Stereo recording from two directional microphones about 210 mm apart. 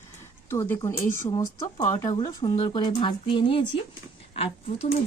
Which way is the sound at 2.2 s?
25° left (ahead or behind).